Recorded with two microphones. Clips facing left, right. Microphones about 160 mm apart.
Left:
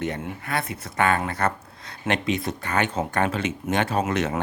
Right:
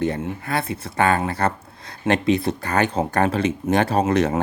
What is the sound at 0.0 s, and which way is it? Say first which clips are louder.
Speech: right 5 dB; 30° right (ahead or behind).